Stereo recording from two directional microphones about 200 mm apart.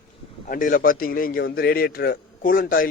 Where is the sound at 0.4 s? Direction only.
45° left (ahead or behind).